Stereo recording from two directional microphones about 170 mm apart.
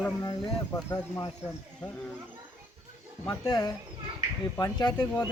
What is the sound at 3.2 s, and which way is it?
Speech, 20° left (ahead or behind).